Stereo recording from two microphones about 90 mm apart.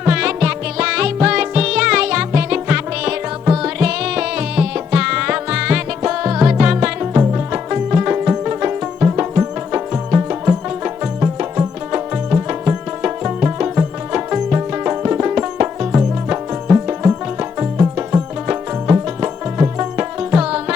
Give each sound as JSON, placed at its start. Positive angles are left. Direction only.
{"t": 0.0, "sound": "music", "side_deg": -10}
{"t": 20.3, "sound": "music", "side_deg": -10}